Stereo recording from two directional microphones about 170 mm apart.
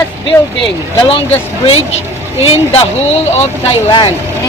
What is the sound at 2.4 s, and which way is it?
Speech, 35° left (ahead or behind).